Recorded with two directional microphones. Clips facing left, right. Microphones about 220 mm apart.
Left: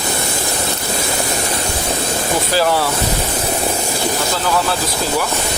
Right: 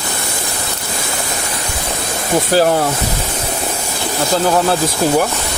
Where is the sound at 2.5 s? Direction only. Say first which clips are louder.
Right 4 dB; 45° right (ahead or behind).